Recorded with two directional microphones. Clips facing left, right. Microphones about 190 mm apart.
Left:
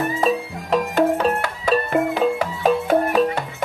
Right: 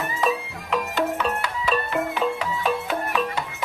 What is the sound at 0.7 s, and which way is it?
Music, 40° left (ahead or behind).